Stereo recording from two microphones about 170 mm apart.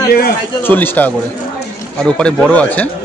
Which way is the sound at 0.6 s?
10° left (ahead or behind).